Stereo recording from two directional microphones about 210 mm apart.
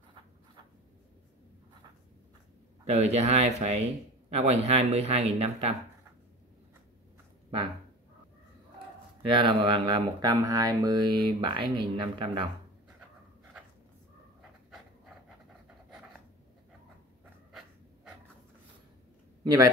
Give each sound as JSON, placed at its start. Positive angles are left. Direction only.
{"t": 2.8, "sound": "speech", "side_deg": -30}
{"t": 9.2, "sound": "speech", "side_deg": -25}
{"t": 17.5, "sound": "dog", "side_deg": 0}
{"t": 19.4, "sound": "a man's voice", "side_deg": -15}